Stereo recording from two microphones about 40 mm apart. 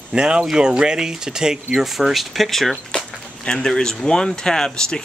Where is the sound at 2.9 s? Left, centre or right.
Left.